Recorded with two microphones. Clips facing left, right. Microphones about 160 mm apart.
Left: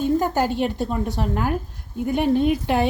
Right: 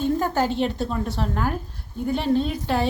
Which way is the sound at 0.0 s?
10° left (ahead or behind).